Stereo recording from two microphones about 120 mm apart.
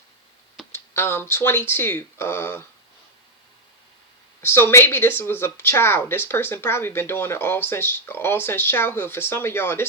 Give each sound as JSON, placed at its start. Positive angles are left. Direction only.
{"t": 0.7, "sound": "speech", "side_deg": 20}
{"t": 4.4, "sound": "speech", "side_deg": 20}